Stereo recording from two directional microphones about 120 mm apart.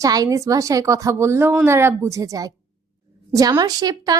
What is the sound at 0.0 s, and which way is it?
A woman's voice, 30° right (ahead or behind).